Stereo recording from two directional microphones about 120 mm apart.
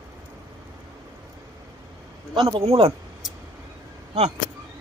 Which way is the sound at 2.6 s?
60° right (ahead or behind).